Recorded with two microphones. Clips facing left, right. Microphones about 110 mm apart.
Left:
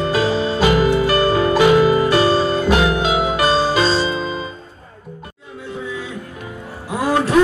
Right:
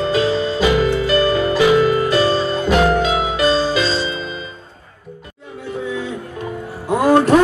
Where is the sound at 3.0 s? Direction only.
55° left (ahead or behind).